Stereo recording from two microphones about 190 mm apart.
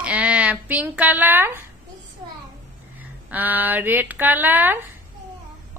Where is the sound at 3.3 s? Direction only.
10° right (ahead or behind).